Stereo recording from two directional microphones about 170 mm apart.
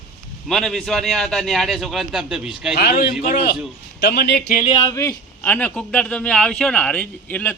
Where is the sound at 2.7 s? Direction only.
70° left (ahead or behind).